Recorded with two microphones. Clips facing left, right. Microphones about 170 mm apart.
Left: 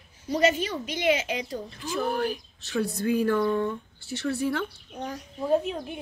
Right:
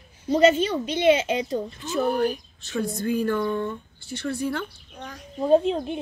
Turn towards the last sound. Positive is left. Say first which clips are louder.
# right 6 dB
turn(degrees=-25)  # may be behind; listen again after turning